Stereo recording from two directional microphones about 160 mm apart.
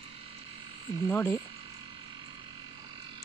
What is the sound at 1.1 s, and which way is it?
Speech, 15° left (ahead or behind).